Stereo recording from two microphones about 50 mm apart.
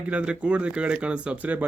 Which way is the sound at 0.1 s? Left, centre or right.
Right.